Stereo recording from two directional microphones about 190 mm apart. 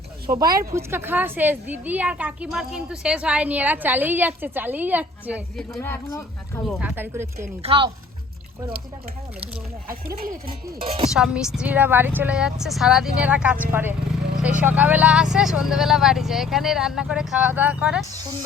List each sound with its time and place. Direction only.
0.3 s a woman's voice: 20° right (ahead or behind)
5.5 s speech: 5° left (ahead or behind)
6.7 s a woman's voice: 5° right (ahead or behind)
7.6 s speech: 30° right (ahead or behind)
9.9 s speech: 50° right (ahead or behind)
10.8 s speech: 30° right (ahead or behind)
11.1 s a woman's voice: 5° right (ahead or behind)